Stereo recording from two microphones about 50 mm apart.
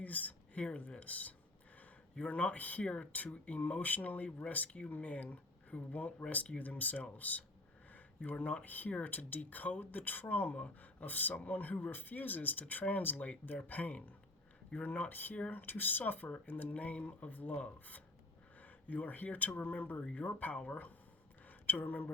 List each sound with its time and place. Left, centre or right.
0.0 s a sound: left
0.8 s speech: left
2.8 s speech: centre
15.6 s speech: left
16.7 s speech: left
21.4 s a sound: left